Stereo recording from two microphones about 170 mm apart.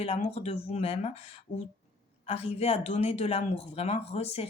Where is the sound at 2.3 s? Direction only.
35° left (ahead or behind).